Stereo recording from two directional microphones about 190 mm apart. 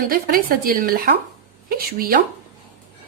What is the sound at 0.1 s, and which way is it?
Speech, 50° right (ahead or behind).